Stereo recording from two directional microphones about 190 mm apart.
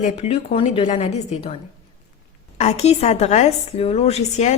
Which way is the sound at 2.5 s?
35° left (ahead or behind).